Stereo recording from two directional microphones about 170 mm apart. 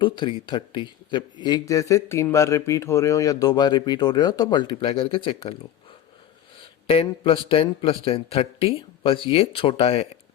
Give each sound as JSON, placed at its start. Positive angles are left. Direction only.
{"t": 0.0, "sound": "speech", "side_deg": 30}
{"t": 6.6, "sound": "a man's voice", "side_deg": 35}